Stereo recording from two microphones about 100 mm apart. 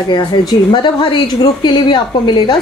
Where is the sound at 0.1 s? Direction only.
50° left (ahead or behind).